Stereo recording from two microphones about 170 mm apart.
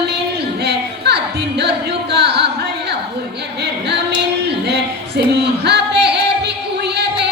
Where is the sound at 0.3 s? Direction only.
75° right (ahead or behind).